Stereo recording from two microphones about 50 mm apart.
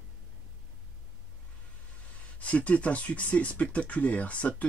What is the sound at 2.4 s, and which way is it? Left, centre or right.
Speech, left.